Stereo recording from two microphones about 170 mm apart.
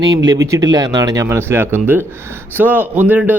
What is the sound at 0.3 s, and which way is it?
Speech, 20° right (ahead or behind).